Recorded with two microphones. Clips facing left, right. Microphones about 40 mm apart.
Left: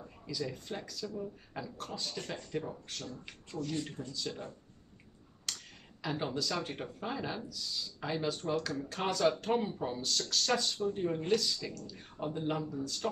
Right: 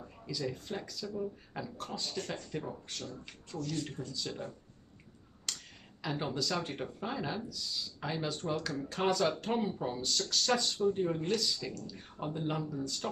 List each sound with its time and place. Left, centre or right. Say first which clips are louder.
0.0 s speech: right 1 dB; centre
3.5 s speech: left 1 dB; left
4.1 s speech: even; centre
5.5 s finger snapping: even; centre
6.0 s speech: even; centre